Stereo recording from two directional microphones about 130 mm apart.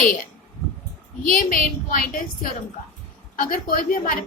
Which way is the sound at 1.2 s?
90° left.